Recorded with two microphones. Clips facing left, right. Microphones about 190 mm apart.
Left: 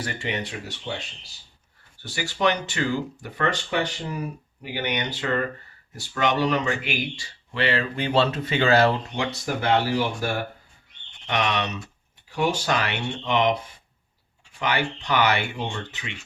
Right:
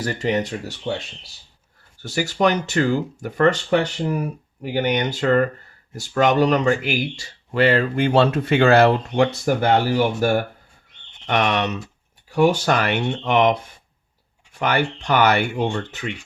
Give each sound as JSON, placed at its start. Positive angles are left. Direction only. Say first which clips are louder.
{"t": 0.0, "sound": "speech", "louder": "right 8 dB", "side_deg": -40}
{"t": 14.6, "sound": "speech", "louder": "right 5 dB", "side_deg": -50}